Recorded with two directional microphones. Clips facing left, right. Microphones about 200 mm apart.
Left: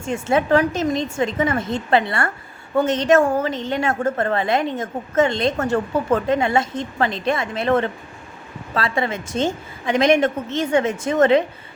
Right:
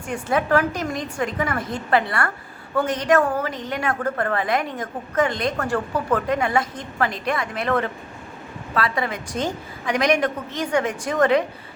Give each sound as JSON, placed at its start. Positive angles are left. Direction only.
{"t": 0.0, "sound": "a woman's voice", "side_deg": 25}